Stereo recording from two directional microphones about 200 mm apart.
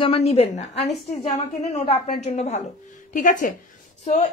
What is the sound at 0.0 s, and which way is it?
A woman's voice, 30° left (ahead or behind).